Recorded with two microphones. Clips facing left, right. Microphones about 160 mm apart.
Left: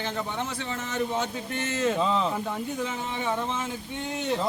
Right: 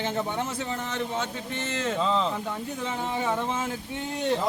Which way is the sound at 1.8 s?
10° left (ahead or behind).